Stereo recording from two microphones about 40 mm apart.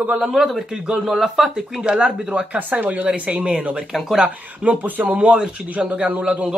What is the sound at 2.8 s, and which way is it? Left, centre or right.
Speech, right.